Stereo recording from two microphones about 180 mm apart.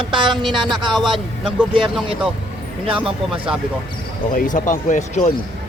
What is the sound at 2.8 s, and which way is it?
Speech, 30° right (ahead or behind).